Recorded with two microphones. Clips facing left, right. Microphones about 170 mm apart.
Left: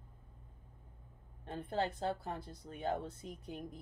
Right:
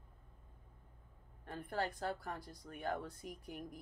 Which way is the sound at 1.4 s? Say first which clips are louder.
Left 3 dB; 25° left (ahead or behind).